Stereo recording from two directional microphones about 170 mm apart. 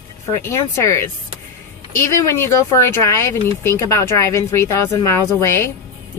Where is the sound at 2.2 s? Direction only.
15° left (ahead or behind).